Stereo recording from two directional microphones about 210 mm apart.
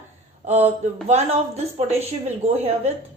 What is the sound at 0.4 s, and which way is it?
A woman's voice, 30° right (ahead or behind).